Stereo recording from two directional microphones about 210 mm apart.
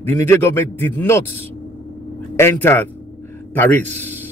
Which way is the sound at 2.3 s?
10° left (ahead or behind).